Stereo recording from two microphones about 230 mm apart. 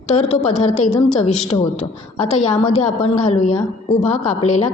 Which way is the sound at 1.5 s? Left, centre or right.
Centre.